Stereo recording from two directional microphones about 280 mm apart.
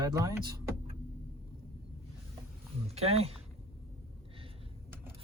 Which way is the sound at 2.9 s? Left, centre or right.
Right.